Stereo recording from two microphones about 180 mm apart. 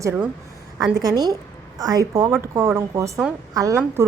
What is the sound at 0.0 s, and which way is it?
A woman's voice, 10° right (ahead or behind).